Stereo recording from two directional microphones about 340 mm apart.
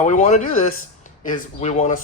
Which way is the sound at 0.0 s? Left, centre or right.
Left.